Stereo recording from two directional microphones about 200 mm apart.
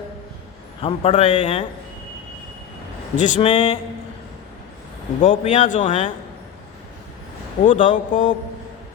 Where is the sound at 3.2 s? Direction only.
35° left (ahead or behind).